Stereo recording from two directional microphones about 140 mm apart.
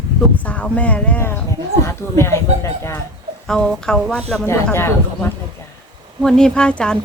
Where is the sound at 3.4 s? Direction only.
5° left (ahead or behind).